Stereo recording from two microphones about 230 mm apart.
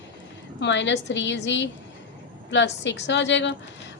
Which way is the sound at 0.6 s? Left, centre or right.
Left.